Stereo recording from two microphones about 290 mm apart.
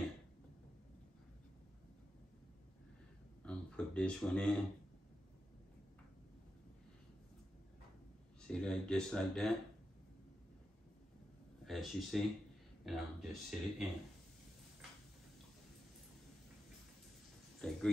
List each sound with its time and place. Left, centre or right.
3.4 s speech: centre
8.5 s speech: centre
11.6 s speech: centre
17.6 s oink: centre